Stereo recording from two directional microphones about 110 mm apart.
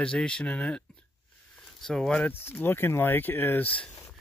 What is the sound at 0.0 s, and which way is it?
Speech, 5° left (ahead or behind).